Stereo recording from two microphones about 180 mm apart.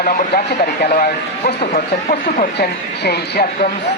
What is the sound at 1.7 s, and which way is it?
Speech, 40° left (ahead or behind).